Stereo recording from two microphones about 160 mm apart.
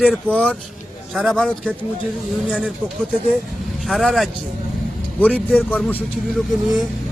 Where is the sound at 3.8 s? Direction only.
Centre (ahead or behind).